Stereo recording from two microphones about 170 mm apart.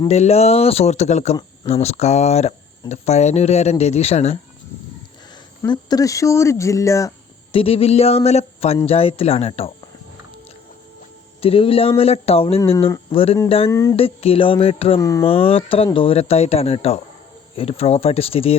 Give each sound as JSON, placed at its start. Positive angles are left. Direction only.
{"t": 0.1, "sound": "speech", "side_deg": 40}
{"t": 5.7, "sound": "speech", "side_deg": 20}
{"t": 7.5, "sound": "speech", "side_deg": 35}
{"t": 11.3, "sound": "speech", "side_deg": 35}
{"t": 13.7, "sound": "speech", "side_deg": 15}
{"t": 13.9, "sound": "speech", "side_deg": 35}